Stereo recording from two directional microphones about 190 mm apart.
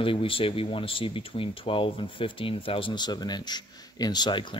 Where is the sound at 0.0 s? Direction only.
30° left (ahead or behind).